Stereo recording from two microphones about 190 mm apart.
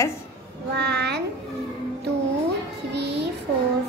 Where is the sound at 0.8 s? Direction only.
60° right (ahead or behind).